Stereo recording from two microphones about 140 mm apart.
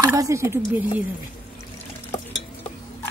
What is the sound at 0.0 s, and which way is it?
Speech, 20° right (ahead or behind).